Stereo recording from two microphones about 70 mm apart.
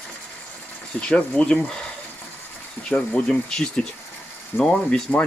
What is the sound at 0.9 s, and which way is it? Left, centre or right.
Speech, centre.